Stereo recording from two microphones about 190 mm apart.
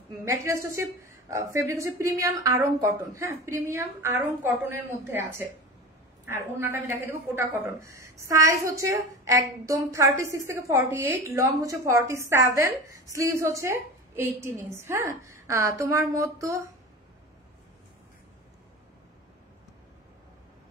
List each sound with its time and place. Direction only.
0.2 s a woman's voice: 15° right (ahead or behind)